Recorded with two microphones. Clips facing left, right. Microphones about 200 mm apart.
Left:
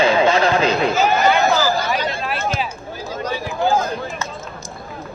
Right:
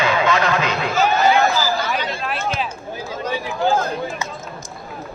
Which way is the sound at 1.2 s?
60° left (ahead or behind).